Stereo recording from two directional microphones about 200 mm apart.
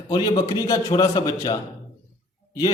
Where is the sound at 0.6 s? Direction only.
15° left (ahead or behind).